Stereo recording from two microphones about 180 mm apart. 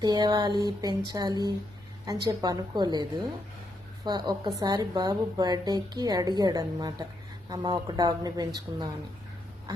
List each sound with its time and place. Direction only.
0.0 s a woman's voice: 20° right (ahead or behind)